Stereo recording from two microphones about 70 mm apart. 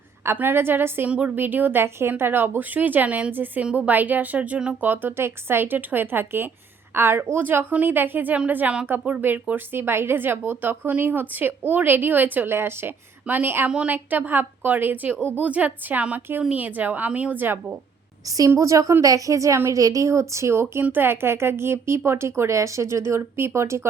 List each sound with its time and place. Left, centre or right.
0.3 s speech: right
1.0 s a woman's voice: centre
1.4 s speech: right
4.8 s speech: right
13.7 s a woman's voice: centre
13.9 s speech: right
18.3 s speech: right